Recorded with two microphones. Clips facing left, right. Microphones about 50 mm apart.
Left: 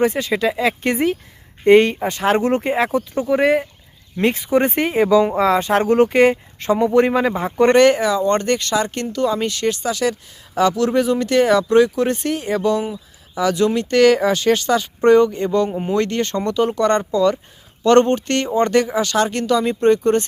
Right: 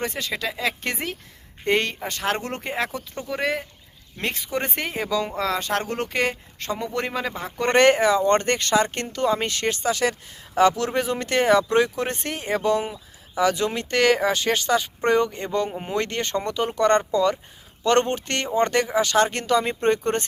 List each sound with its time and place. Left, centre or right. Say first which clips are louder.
0.0 s speech: left 10 dB; centre
7.7 s speech: left 2 dB; right; by 16.0 s centre
16.0 s speech: left 4 dB; centre
17.8 s speech: left 7 dB; centre